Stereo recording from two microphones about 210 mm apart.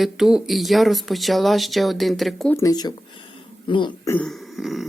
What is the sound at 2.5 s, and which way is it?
Speech, 15° left (ahead or behind).